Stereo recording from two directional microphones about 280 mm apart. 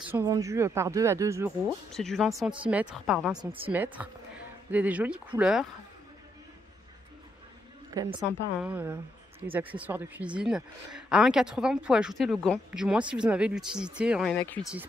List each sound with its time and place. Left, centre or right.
0.1 s speech: centre
1.9 s speech: centre
3.3 s a woman's voice: centre
3.7 s speech: centre
7.9 s a woman's voice: centre